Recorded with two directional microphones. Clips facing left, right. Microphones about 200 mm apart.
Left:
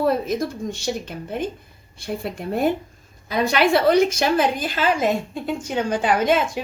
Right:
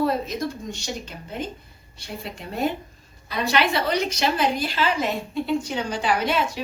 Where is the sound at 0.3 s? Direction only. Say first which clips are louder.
Left 4 dB; 50° left (ahead or behind).